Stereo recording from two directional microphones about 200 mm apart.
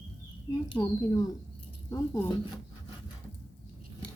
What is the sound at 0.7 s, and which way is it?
Speech, 20° left (ahead or behind).